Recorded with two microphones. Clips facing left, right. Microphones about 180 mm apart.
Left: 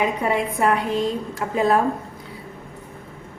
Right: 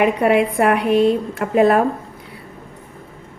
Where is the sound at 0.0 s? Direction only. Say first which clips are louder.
Right 7 dB; 70° right (ahead or behind).